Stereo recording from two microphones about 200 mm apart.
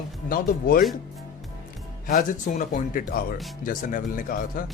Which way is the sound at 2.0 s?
45° left (ahead or behind).